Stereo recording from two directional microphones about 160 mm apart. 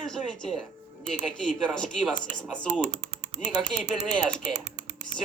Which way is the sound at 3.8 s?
5° left (ahead or behind).